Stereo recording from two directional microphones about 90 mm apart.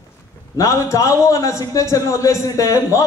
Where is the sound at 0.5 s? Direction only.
35° left (ahead or behind).